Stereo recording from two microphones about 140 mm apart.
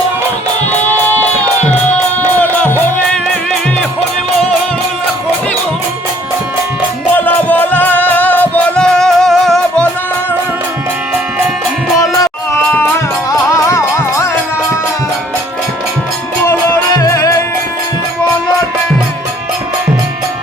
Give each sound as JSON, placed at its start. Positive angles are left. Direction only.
{"t": 2.4, "sound": "music", "side_deg": 15}
{"t": 7.3, "sound": "music", "side_deg": 10}
{"t": 13.5, "sound": "music", "side_deg": 20}
{"t": 16.9, "sound": "music", "side_deg": 20}